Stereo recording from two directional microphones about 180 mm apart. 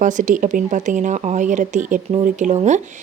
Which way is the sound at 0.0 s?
45° right (ahead or behind).